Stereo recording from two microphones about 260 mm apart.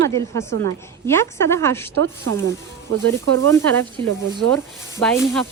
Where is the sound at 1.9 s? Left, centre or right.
Right.